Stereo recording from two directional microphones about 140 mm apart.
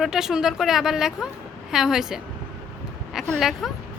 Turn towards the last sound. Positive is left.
turn(degrees=0)  # may be behind; listen again after turning